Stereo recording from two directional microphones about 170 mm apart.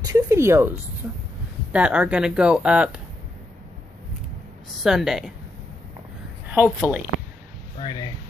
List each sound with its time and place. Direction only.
0.0 s a sound: 20° right (ahead or behind)
1.7 s speech: 5° right (ahead or behind)
4.8 s a woman's voice: centre (ahead or behind)
6.5 s speech: 10° right (ahead or behind)
7.8 s speech: 25° left (ahead or behind)